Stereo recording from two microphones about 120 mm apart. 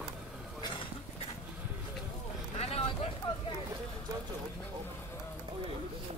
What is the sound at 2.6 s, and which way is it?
Vehicle, 60° left (ahead or behind).